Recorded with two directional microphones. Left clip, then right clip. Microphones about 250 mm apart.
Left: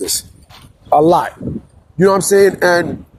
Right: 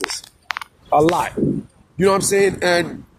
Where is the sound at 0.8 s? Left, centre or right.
Left.